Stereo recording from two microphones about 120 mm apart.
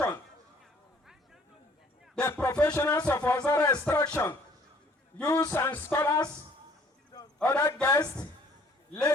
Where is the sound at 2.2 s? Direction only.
15° left (ahead or behind).